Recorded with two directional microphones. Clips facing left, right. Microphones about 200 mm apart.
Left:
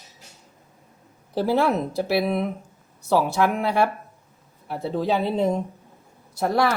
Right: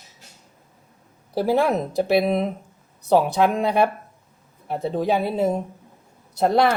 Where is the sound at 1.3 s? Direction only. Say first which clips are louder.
Right 1 dB; 15° right (ahead or behind).